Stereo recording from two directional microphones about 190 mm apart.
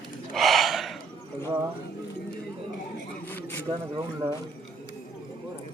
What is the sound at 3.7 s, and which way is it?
Speech, 25° right (ahead or behind).